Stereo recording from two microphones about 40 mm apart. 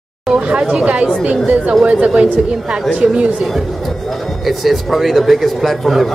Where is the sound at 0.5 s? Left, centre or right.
Right.